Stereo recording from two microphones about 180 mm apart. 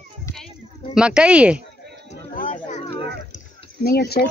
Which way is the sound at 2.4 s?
45° left (ahead or behind).